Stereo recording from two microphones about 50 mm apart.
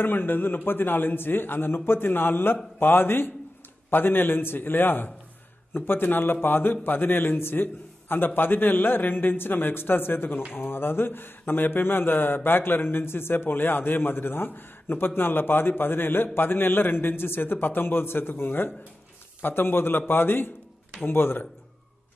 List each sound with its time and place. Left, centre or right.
0.0 s a man's voice: left